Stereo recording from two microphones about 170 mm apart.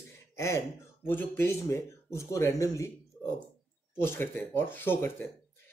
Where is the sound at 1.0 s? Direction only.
10° left (ahead or behind).